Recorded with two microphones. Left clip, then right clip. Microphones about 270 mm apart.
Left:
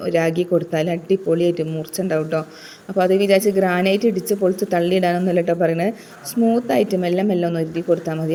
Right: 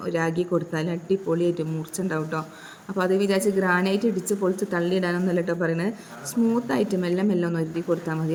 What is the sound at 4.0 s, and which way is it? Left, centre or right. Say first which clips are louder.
Speech: left 6 dB; right.